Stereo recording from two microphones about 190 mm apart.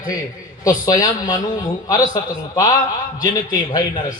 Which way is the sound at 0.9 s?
20° left (ahead or behind).